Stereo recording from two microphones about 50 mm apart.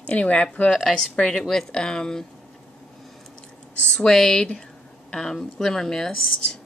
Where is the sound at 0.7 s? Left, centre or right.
Centre.